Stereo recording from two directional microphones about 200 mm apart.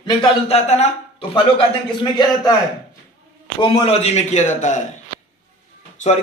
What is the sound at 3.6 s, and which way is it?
A man's voice, 30° left (ahead or behind).